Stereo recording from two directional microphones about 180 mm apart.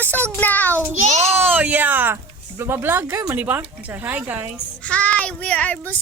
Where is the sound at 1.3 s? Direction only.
10° right (ahead or behind).